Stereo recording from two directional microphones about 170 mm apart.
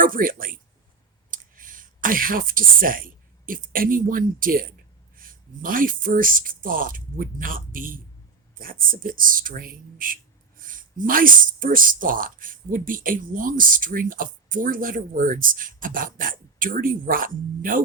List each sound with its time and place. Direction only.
0.0 s speech: 55° right (ahead or behind)